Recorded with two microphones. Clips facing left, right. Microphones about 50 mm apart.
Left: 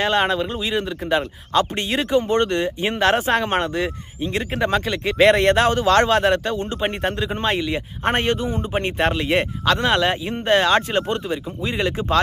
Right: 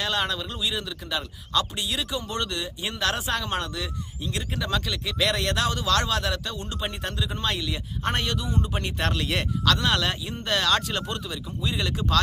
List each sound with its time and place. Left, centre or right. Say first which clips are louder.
0.0 s speech: left 8 dB; left